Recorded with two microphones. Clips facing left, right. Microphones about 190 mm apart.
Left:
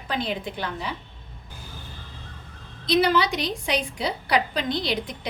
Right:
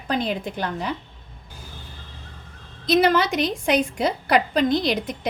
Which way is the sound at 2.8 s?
50° right (ahead or behind).